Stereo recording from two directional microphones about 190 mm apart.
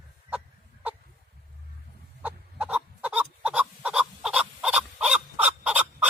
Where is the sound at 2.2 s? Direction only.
10° right (ahead or behind).